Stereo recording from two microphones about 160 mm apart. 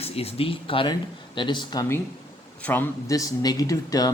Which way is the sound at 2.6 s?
10° left (ahead or behind).